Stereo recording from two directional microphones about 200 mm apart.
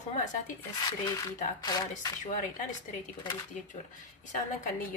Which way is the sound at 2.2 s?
40° left (ahead or behind).